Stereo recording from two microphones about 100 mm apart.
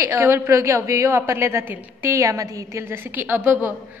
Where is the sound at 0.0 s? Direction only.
25° right (ahead or behind).